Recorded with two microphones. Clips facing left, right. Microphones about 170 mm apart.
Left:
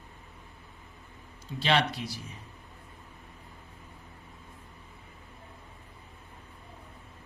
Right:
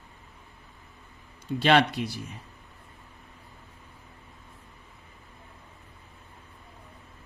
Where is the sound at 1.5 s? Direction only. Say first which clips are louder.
Right 6 dB; 55° right (ahead or behind).